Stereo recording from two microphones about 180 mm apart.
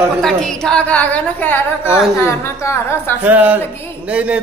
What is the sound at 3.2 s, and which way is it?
A man's voice, 10° right (ahead or behind).